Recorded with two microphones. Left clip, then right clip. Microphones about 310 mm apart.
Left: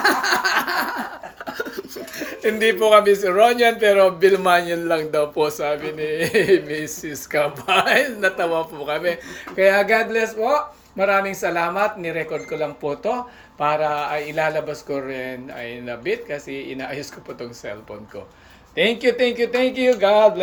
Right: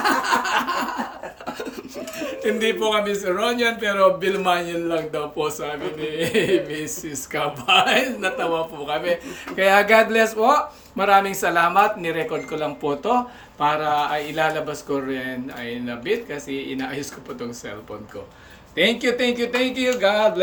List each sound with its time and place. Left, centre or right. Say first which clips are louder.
0.0 s a sound: left 2 dB; centre
1.5 s speech: left 3 dB; centre
9.9 s speech: right 3 dB; right
10.2 s speech: right 2 dB; centre
18.8 s speech: left 2 dB; centre